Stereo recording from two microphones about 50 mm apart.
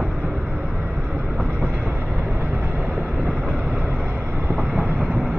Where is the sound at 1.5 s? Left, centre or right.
Right.